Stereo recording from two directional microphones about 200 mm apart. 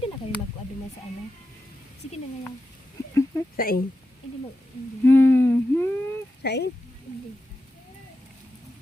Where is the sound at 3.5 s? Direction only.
45° left (ahead or behind).